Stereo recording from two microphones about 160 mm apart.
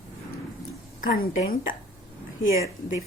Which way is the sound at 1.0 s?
60° left (ahead or behind).